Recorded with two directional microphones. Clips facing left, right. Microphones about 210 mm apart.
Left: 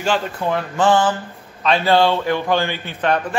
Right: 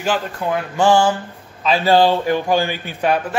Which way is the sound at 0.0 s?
5° right (ahead or behind).